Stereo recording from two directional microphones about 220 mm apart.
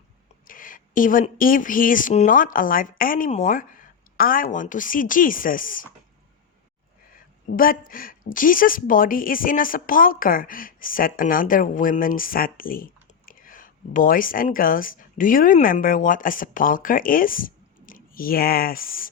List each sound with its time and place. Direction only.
0.4 s a woman's voice: 40° left (ahead or behind)
7.5 s a woman's voice: 40° left (ahead or behind)